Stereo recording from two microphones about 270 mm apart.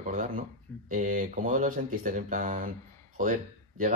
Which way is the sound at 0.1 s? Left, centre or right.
Right.